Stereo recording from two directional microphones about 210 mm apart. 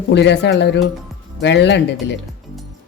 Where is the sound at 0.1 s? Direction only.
55° left (ahead or behind).